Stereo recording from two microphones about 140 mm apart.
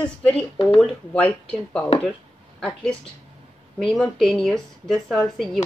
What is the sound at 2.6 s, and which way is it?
A woman's voice, 5° left (ahead or behind).